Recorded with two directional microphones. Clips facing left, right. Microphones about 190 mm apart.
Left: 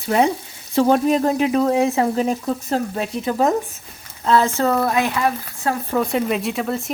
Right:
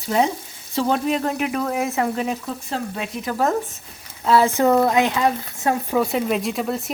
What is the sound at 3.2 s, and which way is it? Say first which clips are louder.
Speech: left 3 dB; 20° left (ahead or behind).